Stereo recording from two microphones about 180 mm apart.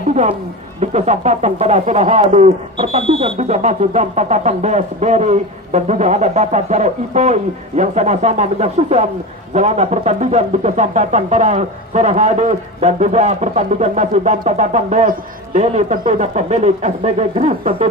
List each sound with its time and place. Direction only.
0.1 s speech: 40° right (ahead or behind)